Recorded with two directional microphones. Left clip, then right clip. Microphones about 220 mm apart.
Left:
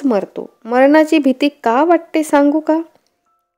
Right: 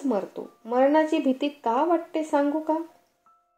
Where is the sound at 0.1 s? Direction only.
50° left (ahead or behind).